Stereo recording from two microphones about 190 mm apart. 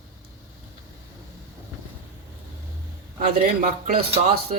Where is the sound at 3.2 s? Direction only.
50° right (ahead or behind).